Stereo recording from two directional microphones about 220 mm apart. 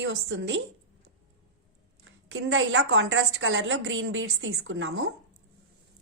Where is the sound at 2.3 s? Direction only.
65° right (ahead or behind).